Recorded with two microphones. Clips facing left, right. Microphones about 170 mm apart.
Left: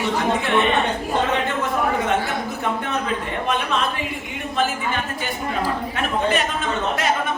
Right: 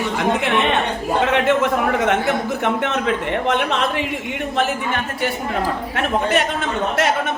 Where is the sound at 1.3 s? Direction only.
90° right.